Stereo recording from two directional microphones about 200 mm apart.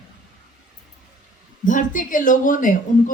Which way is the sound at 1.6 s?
40° left (ahead or behind).